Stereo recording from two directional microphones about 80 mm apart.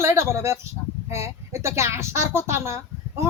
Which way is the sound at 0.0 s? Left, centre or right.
Right.